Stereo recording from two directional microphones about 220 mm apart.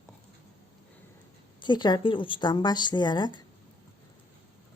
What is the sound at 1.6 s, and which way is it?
A woman's voice, 20° left (ahead or behind).